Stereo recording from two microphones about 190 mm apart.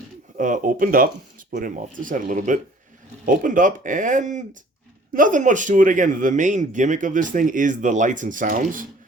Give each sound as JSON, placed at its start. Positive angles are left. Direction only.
{"t": 0.3, "sound": "speech", "side_deg": -45}